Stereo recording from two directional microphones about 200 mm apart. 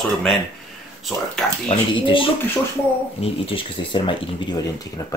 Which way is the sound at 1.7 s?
25° left (ahead or behind).